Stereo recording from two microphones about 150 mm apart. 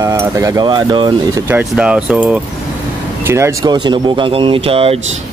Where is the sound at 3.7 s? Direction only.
30° right (ahead or behind).